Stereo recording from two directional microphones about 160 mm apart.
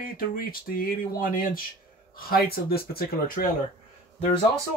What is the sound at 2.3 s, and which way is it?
Speech, 70° left (ahead or behind).